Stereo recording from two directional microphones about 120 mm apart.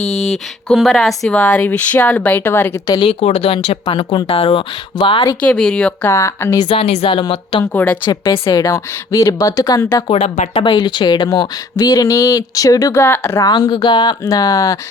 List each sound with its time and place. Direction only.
0.0 s speech: 65° left (ahead or behind)
0.7 s speech: centre (ahead or behind); by 2.8 s 20° left (ahead or behind)
2.8 s speech: 35° left (ahead or behind)
3.1 s speech: 60° left (ahead or behind); by 5.4 s 40° left (ahead or behind)
5.4 s speech: 5° left (ahead or behind)
6.1 s speech: 25° left (ahead or behind)
6.7 s speech: 55° left (ahead or behind)
7.6 s speech: 15° left (ahead or behind)
8.0 s speech: 40° left (ahead or behind)
8.3 s speech: 25° left (ahead or behind)
10.1 s speech: 65° left (ahead or behind)
10.5 s speech: 45° left (ahead or behind); by 13.4 s 20° left (ahead or behind)
13.4 s speech: 35° left (ahead or behind)